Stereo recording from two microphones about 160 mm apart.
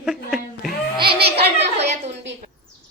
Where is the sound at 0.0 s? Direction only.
Centre (ahead or behind).